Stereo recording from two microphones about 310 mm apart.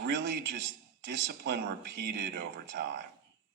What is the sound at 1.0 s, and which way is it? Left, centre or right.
A man's voice, right.